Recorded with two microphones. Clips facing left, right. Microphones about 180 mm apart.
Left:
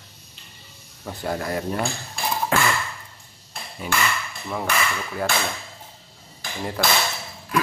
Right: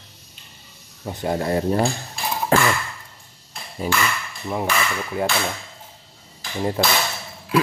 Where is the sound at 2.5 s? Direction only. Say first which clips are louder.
Right 5 dB; 35° right (ahead or behind).